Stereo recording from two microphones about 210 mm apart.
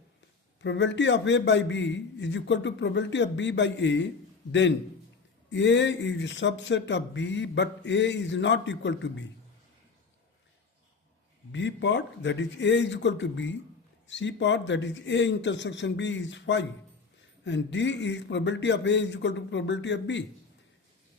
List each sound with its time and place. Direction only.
0.6 s speech: 60° left (ahead or behind)
5.5 s speech: 60° left (ahead or behind)
11.5 s speech: 60° left (ahead or behind)